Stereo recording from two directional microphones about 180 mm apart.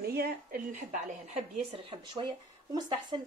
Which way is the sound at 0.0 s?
60° right (ahead or behind).